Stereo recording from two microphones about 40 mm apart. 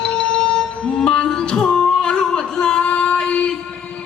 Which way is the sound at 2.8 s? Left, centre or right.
Left.